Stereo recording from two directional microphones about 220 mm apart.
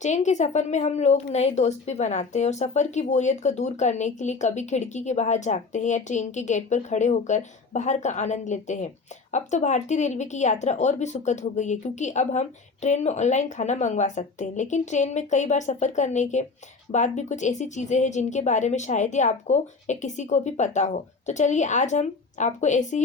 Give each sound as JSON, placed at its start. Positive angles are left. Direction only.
{"t": 0.0, "sound": "a woman's voice", "side_deg": 30}